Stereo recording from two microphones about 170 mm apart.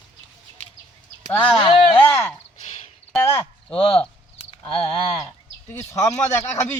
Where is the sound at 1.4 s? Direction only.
30° left (ahead or behind).